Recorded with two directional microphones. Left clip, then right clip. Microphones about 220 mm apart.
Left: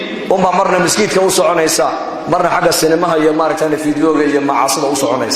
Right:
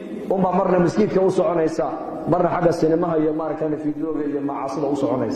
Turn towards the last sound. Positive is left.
turn(degrees=15)  # may be behind; listen again after turning